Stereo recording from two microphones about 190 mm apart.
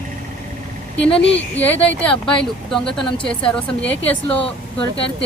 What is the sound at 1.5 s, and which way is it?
Speech, 10° left (ahead or behind).